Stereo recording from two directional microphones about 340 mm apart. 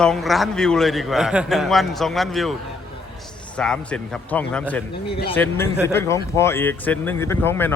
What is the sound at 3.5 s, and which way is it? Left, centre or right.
A man's voice, centre.